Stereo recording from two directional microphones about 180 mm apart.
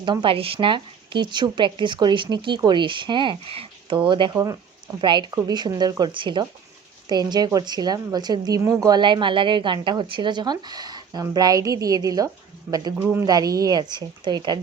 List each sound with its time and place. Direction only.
0.0 s a woman's voice: 25° right (ahead or behind)